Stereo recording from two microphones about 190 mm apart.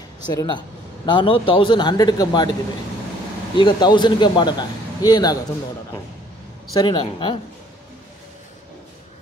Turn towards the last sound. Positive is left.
turn(degrees=25)  # may be behind; listen again after turning